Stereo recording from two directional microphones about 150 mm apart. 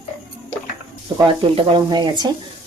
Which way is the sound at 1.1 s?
35° right (ahead or behind).